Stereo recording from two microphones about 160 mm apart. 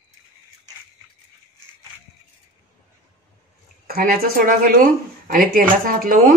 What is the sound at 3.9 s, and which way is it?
Speech, 70° right (ahead or behind).